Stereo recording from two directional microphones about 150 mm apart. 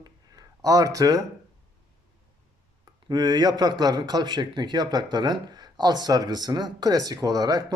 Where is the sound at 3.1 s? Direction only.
30° right (ahead or behind).